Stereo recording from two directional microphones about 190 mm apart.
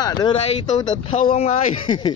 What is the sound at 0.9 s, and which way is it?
Speech, 40° left (ahead or behind).